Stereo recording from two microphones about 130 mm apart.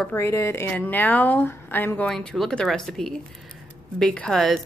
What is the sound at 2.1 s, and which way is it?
A woman's voice, 5° left (ahead or behind).